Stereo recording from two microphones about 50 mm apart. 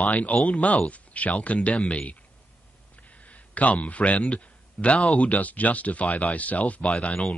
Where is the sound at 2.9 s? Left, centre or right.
Left.